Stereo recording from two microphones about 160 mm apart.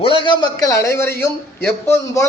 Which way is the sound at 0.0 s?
35° left (ahead or behind).